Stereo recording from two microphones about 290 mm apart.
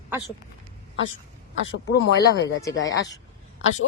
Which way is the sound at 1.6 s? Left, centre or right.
Left.